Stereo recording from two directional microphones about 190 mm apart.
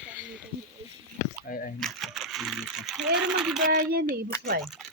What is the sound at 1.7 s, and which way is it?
Speech, centre (ahead or behind).